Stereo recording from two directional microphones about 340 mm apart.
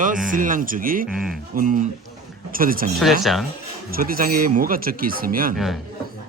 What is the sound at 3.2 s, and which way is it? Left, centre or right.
Speech, centre.